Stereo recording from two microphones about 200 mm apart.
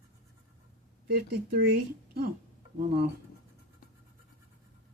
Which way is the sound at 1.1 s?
50° right (ahead or behind).